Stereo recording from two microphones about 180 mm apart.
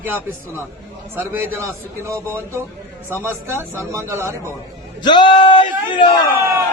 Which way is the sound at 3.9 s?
15° right (ahead or behind).